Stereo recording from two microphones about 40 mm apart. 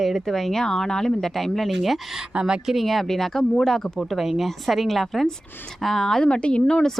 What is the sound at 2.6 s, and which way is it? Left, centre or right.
Speech, centre.